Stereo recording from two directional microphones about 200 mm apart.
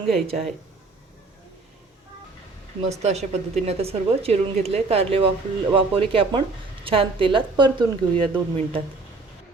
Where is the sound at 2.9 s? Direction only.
35° right (ahead or behind).